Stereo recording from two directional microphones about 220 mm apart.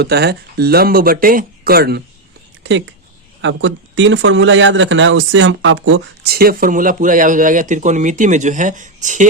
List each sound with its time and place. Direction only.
0.0 s speech: 45° right (ahead or behind)